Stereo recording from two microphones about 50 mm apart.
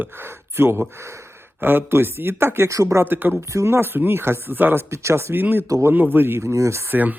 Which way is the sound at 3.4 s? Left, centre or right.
Right.